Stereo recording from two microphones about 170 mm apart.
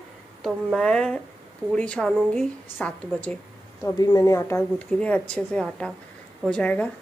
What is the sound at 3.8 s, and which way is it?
A woman's voice, 20° left (ahead or behind).